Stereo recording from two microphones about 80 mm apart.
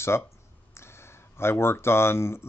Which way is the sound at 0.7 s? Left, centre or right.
Left.